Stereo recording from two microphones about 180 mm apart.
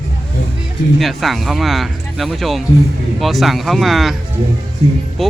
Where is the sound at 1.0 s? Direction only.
Centre (ahead or behind).